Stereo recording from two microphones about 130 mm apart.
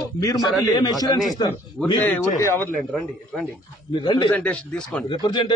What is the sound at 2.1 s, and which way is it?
Speech, 20° left (ahead or behind).